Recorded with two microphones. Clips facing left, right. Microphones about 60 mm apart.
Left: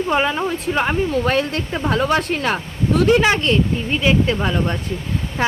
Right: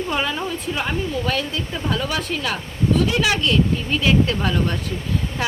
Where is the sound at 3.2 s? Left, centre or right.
Left.